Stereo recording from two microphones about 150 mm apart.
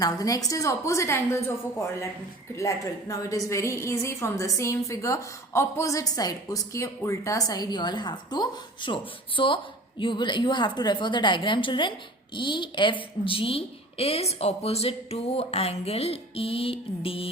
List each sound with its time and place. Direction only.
0.0 s a woman's voice: 25° left (ahead or behind)
2.6 s a woman's voice: 20° left (ahead or behind); by 17.3 s 40° left (ahead or behind)